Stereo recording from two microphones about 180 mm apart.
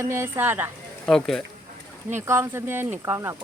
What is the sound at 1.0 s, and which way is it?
Speech, 5° left (ahead or behind).